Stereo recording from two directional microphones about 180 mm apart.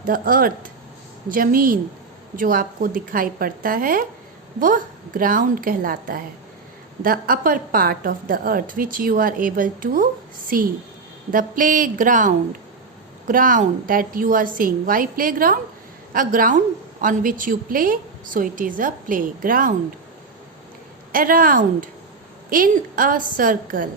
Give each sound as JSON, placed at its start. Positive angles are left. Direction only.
{"t": 0.0, "sound": "a woman's voice", "side_deg": -50}
{"t": 21.1, "sound": "a woman's voice", "side_deg": -50}